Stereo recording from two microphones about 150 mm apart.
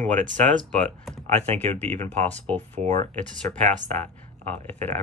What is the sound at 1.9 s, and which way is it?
Speech, 50° right (ahead or behind).